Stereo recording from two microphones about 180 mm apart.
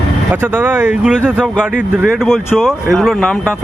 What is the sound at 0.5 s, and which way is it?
Speech, 10° right (ahead or behind).